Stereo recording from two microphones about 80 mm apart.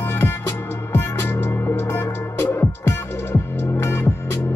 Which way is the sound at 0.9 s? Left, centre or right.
Left.